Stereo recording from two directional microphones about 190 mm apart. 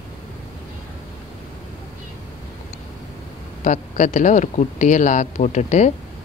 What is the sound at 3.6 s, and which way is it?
Speech, 40° left (ahead or behind).